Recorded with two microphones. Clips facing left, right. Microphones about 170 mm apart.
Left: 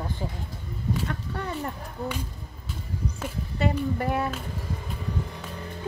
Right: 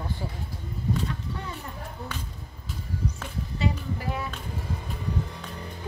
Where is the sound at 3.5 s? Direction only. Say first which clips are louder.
Left 4 dB; 55° left (ahead or behind).